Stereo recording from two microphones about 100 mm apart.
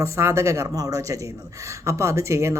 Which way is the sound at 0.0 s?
25° right (ahead or behind).